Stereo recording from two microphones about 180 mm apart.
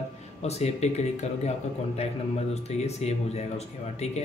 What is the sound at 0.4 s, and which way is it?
Speech, 35° left (ahead or behind).